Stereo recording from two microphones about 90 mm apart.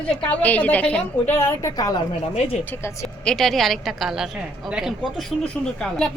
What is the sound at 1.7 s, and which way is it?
Speech, 45° left (ahead or behind).